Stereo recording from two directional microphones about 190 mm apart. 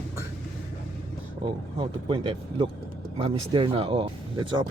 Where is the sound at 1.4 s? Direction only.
25° right (ahead or behind).